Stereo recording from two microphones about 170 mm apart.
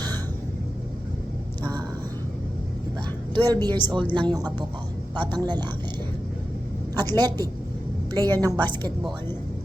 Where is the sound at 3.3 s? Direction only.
25° right (ahead or behind).